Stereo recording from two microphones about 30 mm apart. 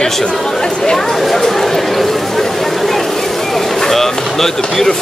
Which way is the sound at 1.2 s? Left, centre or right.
Centre.